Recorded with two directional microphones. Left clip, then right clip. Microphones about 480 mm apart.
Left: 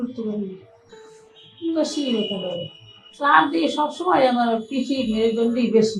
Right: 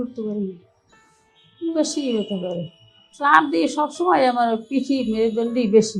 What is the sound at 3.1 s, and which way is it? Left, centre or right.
A woman's voice, right.